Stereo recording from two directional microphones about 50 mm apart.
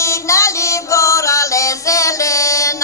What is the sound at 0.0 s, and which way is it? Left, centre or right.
Chant, left.